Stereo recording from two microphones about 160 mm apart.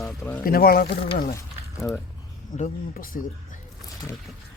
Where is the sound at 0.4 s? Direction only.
70° left (ahead or behind).